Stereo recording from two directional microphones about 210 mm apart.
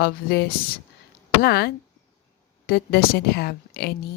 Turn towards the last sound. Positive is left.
turn(degrees=50)  # may be behind; listen again after turning